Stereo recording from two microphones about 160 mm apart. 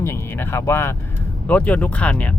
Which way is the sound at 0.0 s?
15° left (ahead or behind).